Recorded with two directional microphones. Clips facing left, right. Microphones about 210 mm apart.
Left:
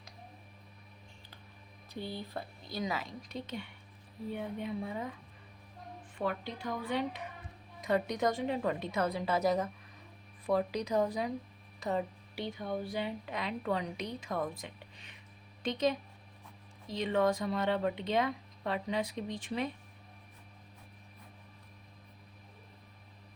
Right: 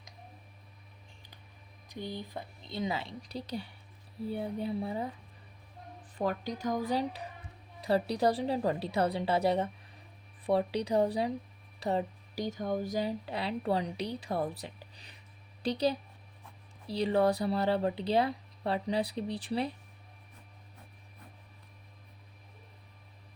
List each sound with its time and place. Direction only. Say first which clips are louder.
1.9 s speech: right 1 dB; 15° right (ahead or behind); by 5.1 s 35° right (ahead or behind)
6.1 s speech: right 3 dB; 40° right (ahead or behind)